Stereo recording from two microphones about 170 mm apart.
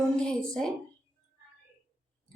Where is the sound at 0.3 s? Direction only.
5° left (ahead or behind).